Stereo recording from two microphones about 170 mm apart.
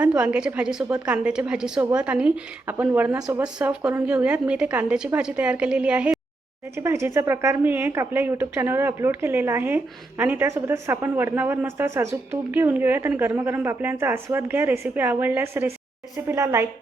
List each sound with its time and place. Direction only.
0.0 s a woman's voice: 10° right (ahead or behind)